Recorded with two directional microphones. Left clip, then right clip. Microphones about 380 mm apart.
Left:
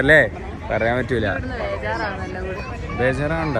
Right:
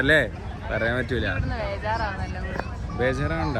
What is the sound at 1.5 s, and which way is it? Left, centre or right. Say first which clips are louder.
Speech: left 3 dB; centre.